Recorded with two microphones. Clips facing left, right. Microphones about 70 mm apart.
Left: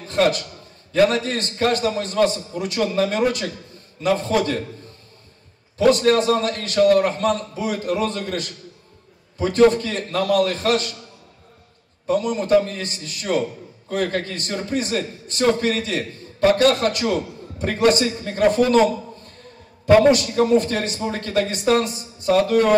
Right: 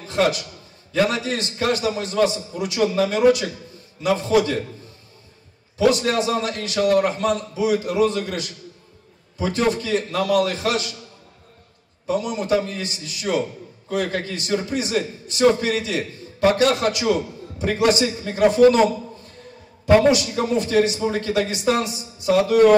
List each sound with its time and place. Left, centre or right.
0.0 s a man's voice: left
5.8 s a man's voice: left
12.1 s a man's voice: left